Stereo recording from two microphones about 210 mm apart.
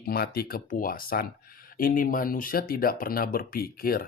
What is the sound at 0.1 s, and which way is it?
Speech, 45° left (ahead or behind).